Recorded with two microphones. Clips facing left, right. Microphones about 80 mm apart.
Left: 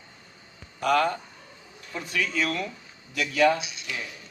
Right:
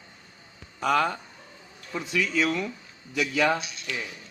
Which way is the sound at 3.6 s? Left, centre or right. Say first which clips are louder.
Even; centre.